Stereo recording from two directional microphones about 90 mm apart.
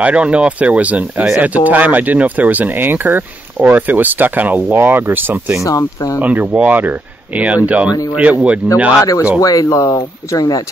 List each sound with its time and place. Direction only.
0.0 s speech: 15° right (ahead or behind)
5.6 s speech: 40° left (ahead or behind)
6.2 s speech: 15° right (ahead or behind)
9.4 s speech: 40° left (ahead or behind)